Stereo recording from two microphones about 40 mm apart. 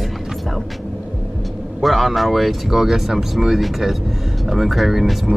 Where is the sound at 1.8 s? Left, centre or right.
Centre.